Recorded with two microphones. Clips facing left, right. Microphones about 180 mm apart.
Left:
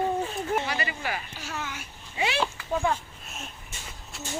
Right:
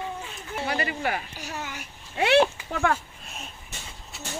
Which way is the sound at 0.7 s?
55° right (ahead or behind).